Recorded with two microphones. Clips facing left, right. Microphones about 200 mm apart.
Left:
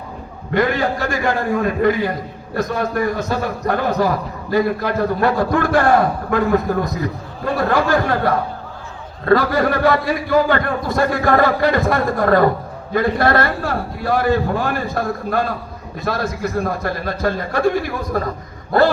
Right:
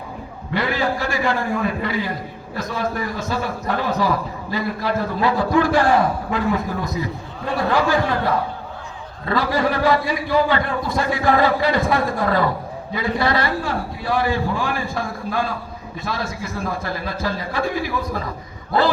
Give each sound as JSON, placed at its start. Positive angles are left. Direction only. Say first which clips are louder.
{"t": 0.5, "sound": "a man's voice", "louder": "left 4 dB", "side_deg": 45}
{"t": 9.3, "sound": "a man's voice", "louder": "left 5 dB", "side_deg": 50}